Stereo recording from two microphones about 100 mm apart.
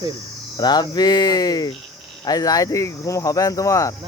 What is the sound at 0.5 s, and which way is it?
Speech, 45° left (ahead or behind).